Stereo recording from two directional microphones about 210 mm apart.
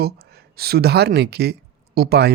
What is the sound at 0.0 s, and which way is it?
Speech, 50° right (ahead or behind).